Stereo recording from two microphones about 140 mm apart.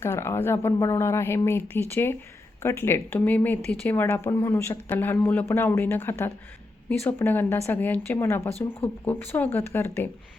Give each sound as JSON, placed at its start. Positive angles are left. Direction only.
{"t": 0.0, "sound": "speech", "side_deg": 20}